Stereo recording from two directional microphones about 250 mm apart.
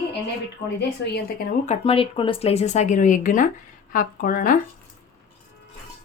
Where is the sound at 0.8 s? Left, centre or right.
Left.